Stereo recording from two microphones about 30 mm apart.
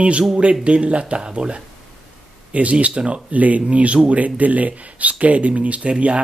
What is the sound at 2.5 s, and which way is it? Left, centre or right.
Speech, right.